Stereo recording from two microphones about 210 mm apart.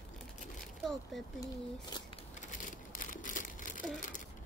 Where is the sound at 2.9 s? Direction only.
40° left (ahead or behind).